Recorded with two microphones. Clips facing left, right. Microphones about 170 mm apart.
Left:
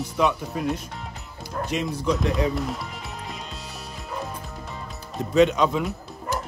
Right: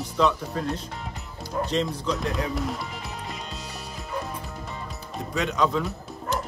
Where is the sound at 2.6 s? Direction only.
Centre (ahead or behind).